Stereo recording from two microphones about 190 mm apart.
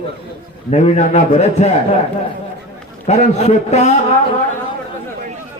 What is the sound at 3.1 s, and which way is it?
Speech, 35° left (ahead or behind).